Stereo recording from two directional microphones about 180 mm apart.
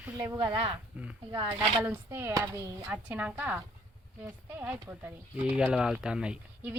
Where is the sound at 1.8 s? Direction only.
10° right (ahead or behind).